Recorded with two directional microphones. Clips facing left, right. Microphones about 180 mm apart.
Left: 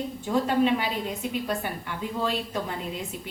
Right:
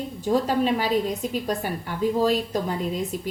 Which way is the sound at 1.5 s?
40° right (ahead or behind).